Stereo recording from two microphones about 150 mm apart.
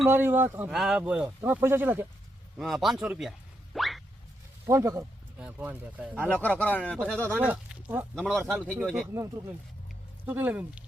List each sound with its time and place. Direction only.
0.1 s speech: 15° right (ahead or behind)
2.6 s speech: centre (ahead or behind)
4.6 s speech: 20° right (ahead or behind)
5.4 s speech: 10° right (ahead or behind)
6.3 s speech: 10° left (ahead or behind)
7.3 s speech: 10° right (ahead or behind)
8.3 s speech: centre (ahead or behind)
9.0 s speech: 20° right (ahead or behind)